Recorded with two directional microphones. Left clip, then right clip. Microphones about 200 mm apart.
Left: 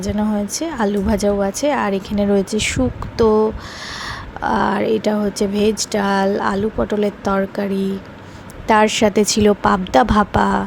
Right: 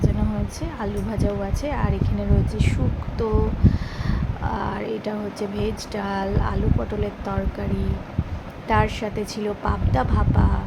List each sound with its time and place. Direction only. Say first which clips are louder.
0.6 s a woman's voice: left 11 dB; 40° left (ahead or behind)